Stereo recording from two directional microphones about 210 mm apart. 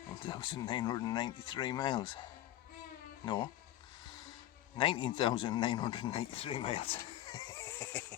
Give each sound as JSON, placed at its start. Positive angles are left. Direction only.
{"t": 0.3, "sound": "speech", "side_deg": 20}
{"t": 4.8, "sound": "speech", "side_deg": 25}